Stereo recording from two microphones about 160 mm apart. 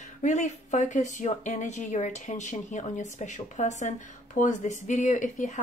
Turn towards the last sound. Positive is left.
turn(degrees=50)  # may be behind; listen again after turning